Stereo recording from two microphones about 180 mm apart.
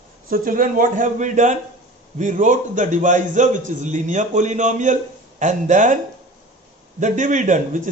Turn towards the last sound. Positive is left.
turn(degrees=-45)  # may be behind; listen again after turning